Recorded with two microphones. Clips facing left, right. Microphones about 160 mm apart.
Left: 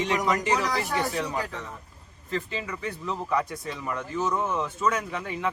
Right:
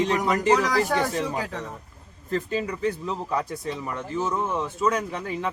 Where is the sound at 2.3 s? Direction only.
40° right (ahead or behind).